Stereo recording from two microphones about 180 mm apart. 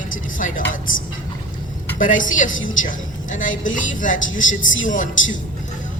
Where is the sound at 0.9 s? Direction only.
90° left.